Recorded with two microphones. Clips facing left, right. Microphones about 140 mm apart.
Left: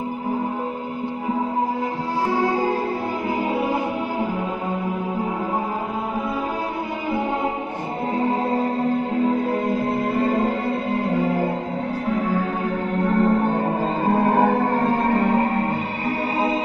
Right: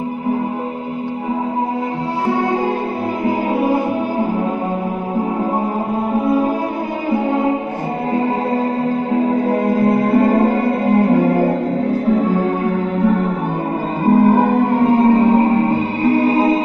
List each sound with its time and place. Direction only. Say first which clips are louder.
9.5 s music: right 7 dB; 60° right (ahead or behind)
13.0 s music: left 1 dB; 5° right (ahead or behind); by 16.5 s 30° right (ahead or behind)